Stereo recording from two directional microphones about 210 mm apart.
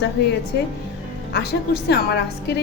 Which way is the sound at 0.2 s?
55° left (ahead or behind).